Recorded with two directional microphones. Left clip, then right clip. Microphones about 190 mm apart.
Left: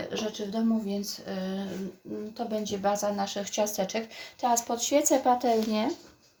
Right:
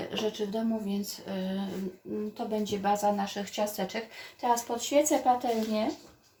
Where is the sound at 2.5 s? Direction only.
35° left (ahead or behind).